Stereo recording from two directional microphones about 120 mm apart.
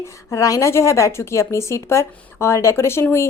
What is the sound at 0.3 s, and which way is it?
A woman's voice, 25° left (ahead or behind).